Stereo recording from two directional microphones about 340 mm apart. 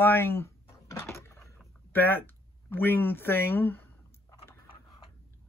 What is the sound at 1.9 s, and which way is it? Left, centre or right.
Speech, centre.